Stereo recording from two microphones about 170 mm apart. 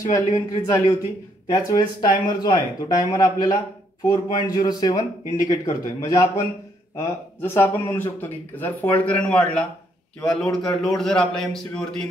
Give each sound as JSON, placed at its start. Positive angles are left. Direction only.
{"t": 0.1, "sound": "a man's voice", "side_deg": 20}